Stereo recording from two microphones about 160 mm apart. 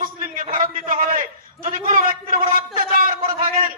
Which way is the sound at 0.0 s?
60° right (ahead or behind).